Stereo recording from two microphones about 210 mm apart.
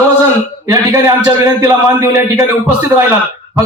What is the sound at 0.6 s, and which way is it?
A man's voice, 15° right (ahead or behind).